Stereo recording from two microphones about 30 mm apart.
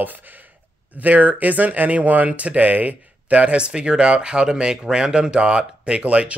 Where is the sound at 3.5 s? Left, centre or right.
Right.